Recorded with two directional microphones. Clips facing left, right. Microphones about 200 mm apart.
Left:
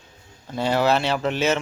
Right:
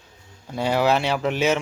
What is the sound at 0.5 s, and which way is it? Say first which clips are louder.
Speech: even; 10° right (ahead or behind).